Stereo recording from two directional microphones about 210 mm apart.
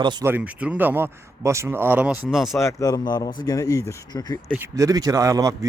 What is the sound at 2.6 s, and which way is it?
Speech, 15° left (ahead or behind).